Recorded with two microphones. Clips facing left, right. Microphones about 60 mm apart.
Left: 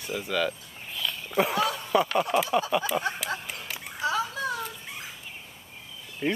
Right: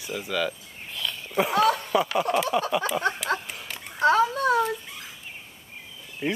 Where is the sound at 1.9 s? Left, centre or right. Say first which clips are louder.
Even; centre.